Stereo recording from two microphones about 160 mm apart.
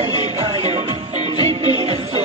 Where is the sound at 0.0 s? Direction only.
40° right (ahead or behind).